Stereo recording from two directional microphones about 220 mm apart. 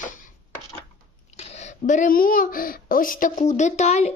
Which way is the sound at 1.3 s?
30° left (ahead or behind).